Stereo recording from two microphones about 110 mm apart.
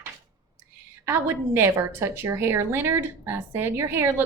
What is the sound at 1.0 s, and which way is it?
A woman's voice, 25° right (ahead or behind).